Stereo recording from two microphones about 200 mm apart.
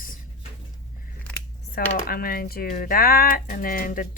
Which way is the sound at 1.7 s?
45° left (ahead or behind).